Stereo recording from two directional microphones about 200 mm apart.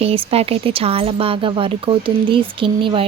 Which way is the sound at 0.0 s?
30° right (ahead or behind).